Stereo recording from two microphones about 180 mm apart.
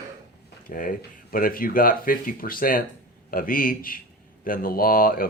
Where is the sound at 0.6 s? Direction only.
50° left (ahead or behind).